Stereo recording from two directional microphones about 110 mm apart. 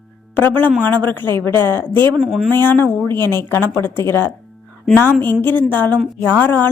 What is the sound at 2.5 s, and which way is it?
A woman's voice, 20° left (ahead or behind).